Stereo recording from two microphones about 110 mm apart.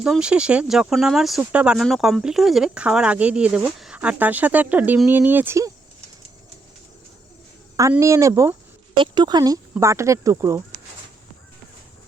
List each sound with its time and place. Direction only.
0.0 s speech: 5° right (ahead or behind)
7.8 s speech: 30° right (ahead or behind)
9.0 s speech: 40° right (ahead or behind)
9.8 s speech: 25° right (ahead or behind)